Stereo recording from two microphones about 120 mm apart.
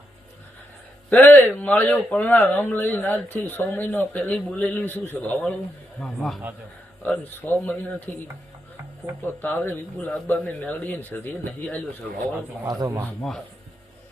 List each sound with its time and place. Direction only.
1.1 s speech: 15° left (ahead or behind)
6.0 s speech: 5° left (ahead or behind)
7.0 s speech: 15° left (ahead or behind)
9.2 s speech: 15° left (ahead or behind)
12.6 s speech: 30° right (ahead or behind)
13.2 s speech: centre (ahead or behind)